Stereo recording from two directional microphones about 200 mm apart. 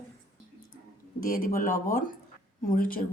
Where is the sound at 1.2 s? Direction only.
45° left (ahead or behind).